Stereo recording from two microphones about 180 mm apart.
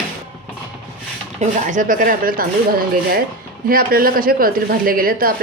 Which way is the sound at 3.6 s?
55° right (ahead or behind).